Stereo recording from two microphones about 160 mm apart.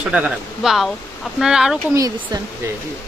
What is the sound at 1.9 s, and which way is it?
Speech, 20° right (ahead or behind).